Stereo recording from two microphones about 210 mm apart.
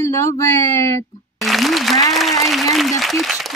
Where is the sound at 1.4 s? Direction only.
Centre (ahead or behind).